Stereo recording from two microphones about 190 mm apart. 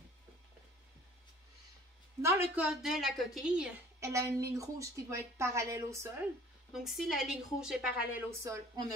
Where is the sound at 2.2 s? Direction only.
10° right (ahead or behind).